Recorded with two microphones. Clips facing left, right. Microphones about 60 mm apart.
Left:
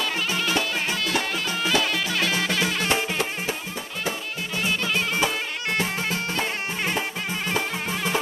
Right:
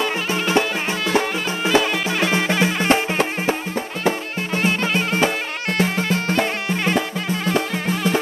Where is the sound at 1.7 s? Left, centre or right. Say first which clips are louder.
Right 6 dB; right.